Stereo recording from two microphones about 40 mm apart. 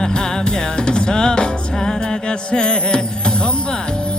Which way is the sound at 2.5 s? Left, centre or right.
Left.